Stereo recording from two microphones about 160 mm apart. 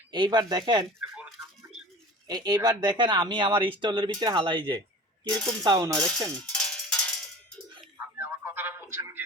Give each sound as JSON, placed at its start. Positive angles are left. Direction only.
{"t": 0.1, "sound": "speech", "side_deg": -30}
{"t": 2.2, "sound": "speech", "side_deg": -25}
{"t": 5.3, "sound": "speech", "side_deg": 5}
{"t": 5.6, "sound": "speech", "side_deg": -25}
{"t": 5.9, "sound": "speech", "side_deg": 5}
{"t": 6.5, "sound": "a sound", "side_deg": 5}
{"t": 8.2, "sound": "a sound", "side_deg": -15}